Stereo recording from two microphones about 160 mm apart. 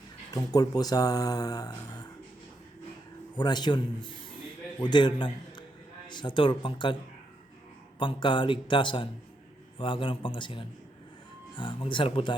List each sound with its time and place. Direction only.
0.3 s speech: 25° left (ahead or behind)
3.3 s a man's voice: 25° left (ahead or behind)
7.9 s speech: 30° left (ahead or behind)